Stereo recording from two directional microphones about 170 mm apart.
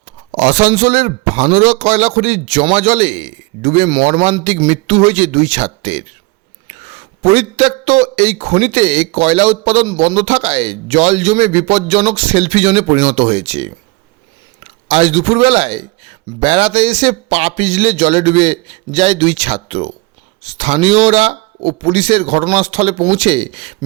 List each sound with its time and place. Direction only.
0.3 s a man's voice: 45° right (ahead or behind)